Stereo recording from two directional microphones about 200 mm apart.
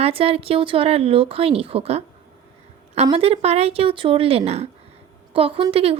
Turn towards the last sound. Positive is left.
turn(degrees=-30)  # may be behind; listen again after turning